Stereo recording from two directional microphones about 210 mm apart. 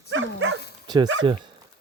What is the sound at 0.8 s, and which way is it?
Dog, 20° right (ahead or behind).